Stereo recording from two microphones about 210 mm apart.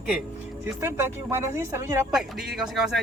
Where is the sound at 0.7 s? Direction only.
10° right (ahead or behind).